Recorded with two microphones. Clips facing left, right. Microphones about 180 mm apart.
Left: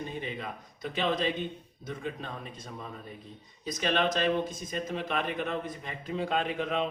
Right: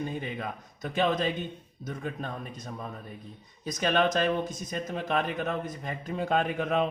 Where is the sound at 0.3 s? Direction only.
45° right (ahead or behind).